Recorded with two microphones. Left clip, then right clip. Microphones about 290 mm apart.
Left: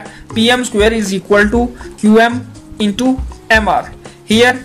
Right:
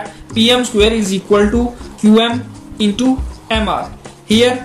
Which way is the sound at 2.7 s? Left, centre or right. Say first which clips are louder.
Even; left.